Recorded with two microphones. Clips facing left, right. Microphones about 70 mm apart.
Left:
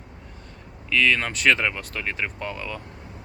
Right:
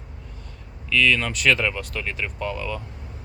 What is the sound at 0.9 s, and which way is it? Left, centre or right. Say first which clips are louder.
Speech: right 1 dB; left.